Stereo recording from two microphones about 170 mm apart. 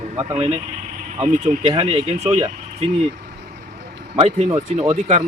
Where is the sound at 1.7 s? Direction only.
30° right (ahead or behind).